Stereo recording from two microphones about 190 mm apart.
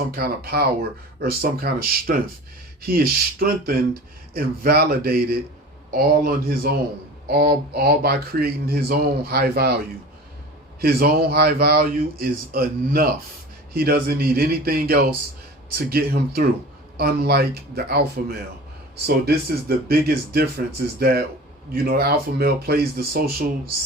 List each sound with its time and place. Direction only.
0.1 s speech: 55° right (ahead or behind)